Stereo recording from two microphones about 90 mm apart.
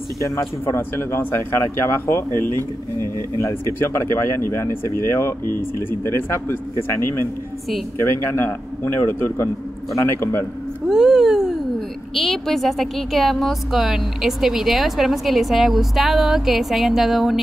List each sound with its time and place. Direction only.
0.7 s speech: 25° left (ahead or behind)
10.9 s a woman's voice: 5° right (ahead or behind)